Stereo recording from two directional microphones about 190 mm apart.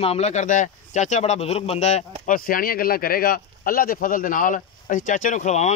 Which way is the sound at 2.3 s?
50° left (ahead or behind).